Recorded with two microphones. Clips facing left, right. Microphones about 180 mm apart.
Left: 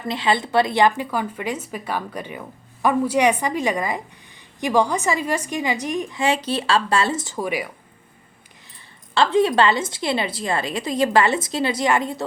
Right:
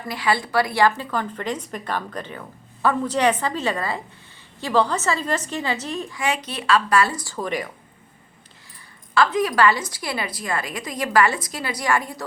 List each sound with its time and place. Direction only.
0.1 s a woman's voice: 20° left (ahead or behind)
7.3 s a woman's voice: 10° left (ahead or behind)
9.1 s a woman's voice: 25° left (ahead or behind)